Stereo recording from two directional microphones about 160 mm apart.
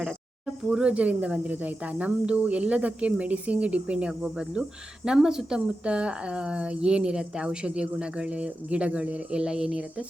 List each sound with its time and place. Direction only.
0.0 s speech: centre (ahead or behind)